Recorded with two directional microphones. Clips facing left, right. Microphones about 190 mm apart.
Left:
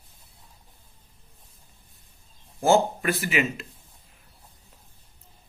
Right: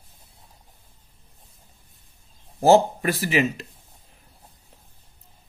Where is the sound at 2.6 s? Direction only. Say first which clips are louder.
Right 4 dB; 35° right (ahead or behind).